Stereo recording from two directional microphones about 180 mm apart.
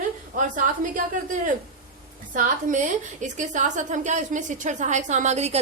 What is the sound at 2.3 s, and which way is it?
A woman's voice, 45° right (ahead or behind).